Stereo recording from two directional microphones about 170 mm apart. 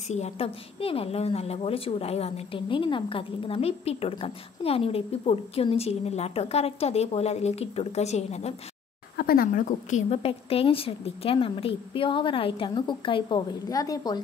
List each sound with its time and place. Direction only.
0.1 s a woman's voice: 35° left (ahead or behind)
9.1 s a woman's voice: 60° left (ahead or behind); by 14.2 s 20° left (ahead or behind)